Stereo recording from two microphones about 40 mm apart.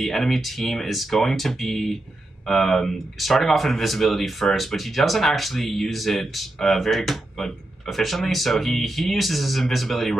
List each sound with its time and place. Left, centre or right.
0.0 s speech: centre
7.9 s speech: centre